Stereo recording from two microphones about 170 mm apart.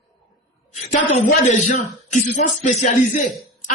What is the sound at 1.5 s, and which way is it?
Speech, 45° left (ahead or behind).